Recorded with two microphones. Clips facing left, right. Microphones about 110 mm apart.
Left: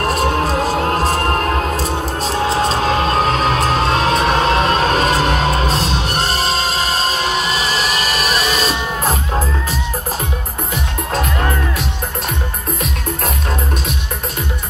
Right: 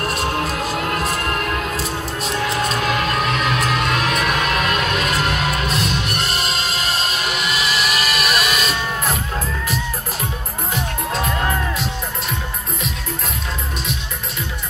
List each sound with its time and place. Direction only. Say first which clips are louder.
0.0 s music: left 5 dB; 45° left (ahead or behind)